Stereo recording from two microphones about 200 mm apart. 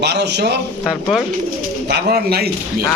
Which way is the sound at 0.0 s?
55° right (ahead or behind).